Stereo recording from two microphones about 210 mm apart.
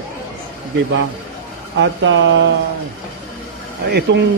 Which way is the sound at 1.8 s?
60° right (ahead or behind).